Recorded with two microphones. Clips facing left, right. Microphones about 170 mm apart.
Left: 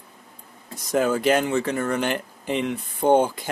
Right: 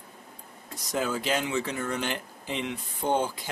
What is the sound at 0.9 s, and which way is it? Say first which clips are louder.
Speech: left 8 dB; 55° left (ahead or behind).